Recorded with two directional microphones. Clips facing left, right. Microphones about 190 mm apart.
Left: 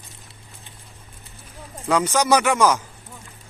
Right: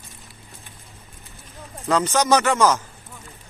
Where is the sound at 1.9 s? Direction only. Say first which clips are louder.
Even; 10° left (ahead or behind).